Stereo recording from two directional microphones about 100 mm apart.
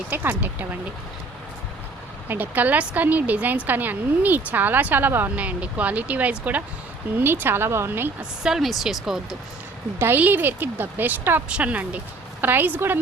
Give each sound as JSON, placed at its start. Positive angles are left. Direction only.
{"t": 0.1, "sound": "speech", "side_deg": -20}
{"t": 2.2, "sound": "a woman's voice", "side_deg": -20}
{"t": 8.2, "sound": "speech", "side_deg": -5}
{"t": 10.0, "sound": "speech", "side_deg": -20}